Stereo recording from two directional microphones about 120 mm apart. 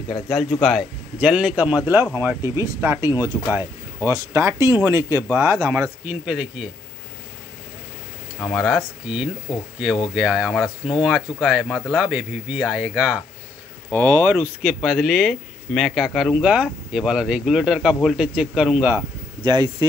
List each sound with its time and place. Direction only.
0.3 s speech: centre (ahead or behind)
1.2 s speech: 10° right (ahead or behind)
8.5 s speech: centre (ahead or behind)
13.9 s speech: 30° right (ahead or behind)
14.2 s speech: 10° right (ahead or behind)
19.4 s speech: 35° right (ahead or behind)